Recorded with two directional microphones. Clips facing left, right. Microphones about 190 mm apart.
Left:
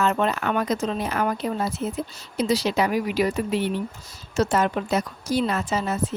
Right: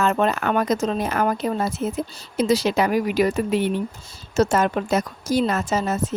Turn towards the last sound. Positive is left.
turn(degrees=-45)  # may be behind; listen again after turning